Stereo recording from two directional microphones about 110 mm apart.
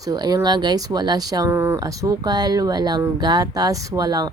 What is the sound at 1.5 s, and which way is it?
Speech, 25° right (ahead or behind).